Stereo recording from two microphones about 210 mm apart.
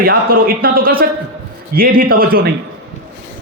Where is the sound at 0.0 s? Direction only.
45° right (ahead or behind).